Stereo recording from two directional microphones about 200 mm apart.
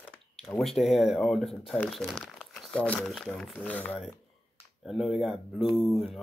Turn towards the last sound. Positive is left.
turn(degrees=0)  # may be behind; listen again after turning